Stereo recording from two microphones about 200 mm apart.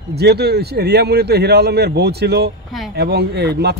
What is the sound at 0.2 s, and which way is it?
A man's voice, 55° right (ahead or behind).